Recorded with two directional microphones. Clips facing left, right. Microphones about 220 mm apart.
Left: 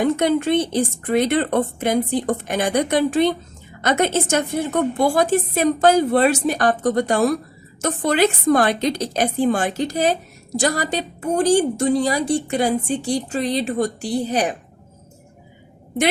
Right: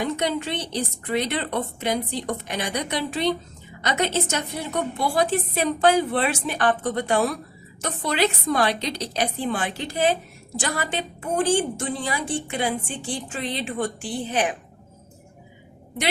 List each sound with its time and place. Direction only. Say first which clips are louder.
0.0 s a woman's voice: left 7 dB; 50° left (ahead or behind)